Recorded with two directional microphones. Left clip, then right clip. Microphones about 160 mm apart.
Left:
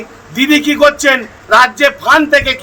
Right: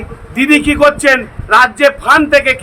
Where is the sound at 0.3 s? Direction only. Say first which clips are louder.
Right 1 dB; 15° right (ahead or behind).